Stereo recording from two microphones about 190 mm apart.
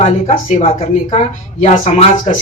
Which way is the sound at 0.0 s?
35° left (ahead or behind).